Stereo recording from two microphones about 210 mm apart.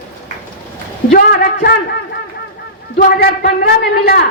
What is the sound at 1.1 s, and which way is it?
Speech, 45° left (ahead or behind).